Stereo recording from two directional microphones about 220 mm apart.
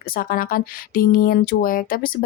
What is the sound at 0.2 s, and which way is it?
Speech, 40° left (ahead or behind).